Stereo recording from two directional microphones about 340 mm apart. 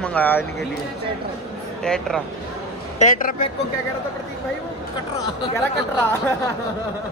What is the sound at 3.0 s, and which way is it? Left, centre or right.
Speech, left.